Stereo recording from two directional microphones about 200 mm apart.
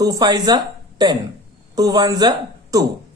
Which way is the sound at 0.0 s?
20° right (ahead or behind).